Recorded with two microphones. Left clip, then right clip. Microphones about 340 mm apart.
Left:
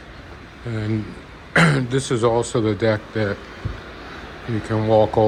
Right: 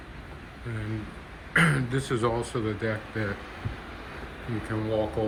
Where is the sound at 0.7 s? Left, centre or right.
Centre.